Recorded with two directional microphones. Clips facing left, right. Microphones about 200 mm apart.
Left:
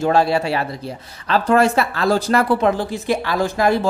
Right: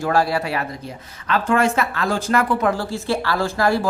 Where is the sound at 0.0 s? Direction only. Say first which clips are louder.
Left 3 dB; 25° left (ahead or behind).